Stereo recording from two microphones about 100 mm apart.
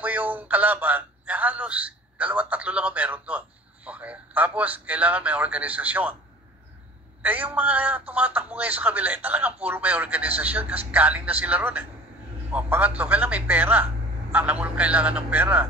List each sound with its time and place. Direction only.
0.0 s speech: 15° right (ahead or behind)
7.2 s speech: 15° right (ahead or behind)